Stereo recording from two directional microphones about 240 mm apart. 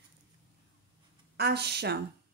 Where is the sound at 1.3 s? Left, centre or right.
Right.